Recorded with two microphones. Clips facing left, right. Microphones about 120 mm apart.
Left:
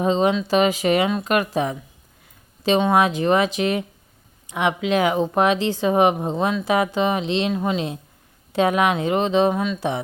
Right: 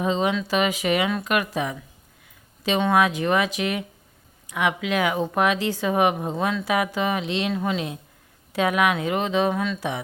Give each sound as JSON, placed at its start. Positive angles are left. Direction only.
{"t": 0.0, "sound": "a woman's voice", "side_deg": 35}